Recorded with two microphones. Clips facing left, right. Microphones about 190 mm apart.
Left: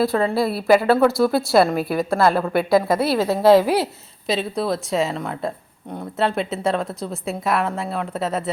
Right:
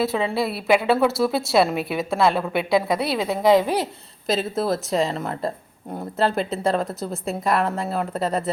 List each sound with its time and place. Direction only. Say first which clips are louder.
0.0 s a woman's voice: left 3 dB; centre (ahead or behind)
3.4 s a woman's voice: left 3 dB; 20° right (ahead or behind)
4.3 s a woman's voice: even; centre (ahead or behind)